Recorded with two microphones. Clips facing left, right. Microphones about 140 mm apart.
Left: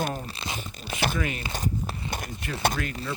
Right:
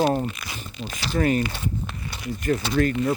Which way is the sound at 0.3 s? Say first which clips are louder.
Right 1 dB; 30° left (ahead or behind).